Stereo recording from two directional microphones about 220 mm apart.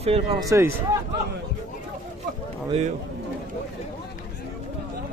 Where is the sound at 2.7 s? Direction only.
30° right (ahead or behind).